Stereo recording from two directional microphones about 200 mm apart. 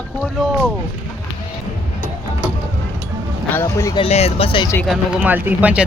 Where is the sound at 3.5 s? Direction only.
15° left (ahead or behind).